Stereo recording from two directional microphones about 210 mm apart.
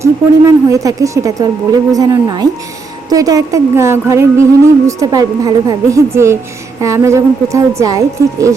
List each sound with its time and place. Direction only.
0.0 s a woman's voice: 15° right (ahead or behind)